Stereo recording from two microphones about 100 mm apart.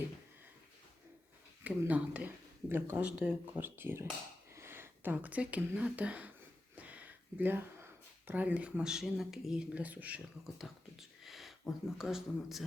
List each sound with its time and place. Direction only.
1.6 s speech: 15° right (ahead or behind)
6.8 s a sound: 15° right (ahead or behind)
8.3 s speech: 15° right (ahead or behind)
10.6 s speech: 5° right (ahead or behind)